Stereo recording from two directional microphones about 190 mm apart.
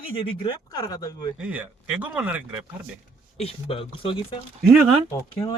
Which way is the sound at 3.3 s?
30° left (ahead or behind).